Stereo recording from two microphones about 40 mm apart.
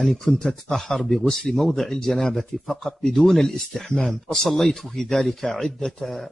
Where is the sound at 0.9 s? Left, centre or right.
Centre.